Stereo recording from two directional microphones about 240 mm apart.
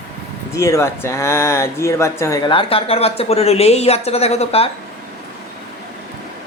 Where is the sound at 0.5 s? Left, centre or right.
Centre.